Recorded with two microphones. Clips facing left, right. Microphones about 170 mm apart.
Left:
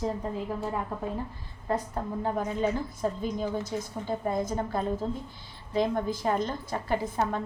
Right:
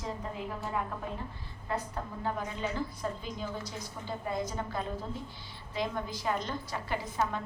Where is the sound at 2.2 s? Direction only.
45° left (ahead or behind).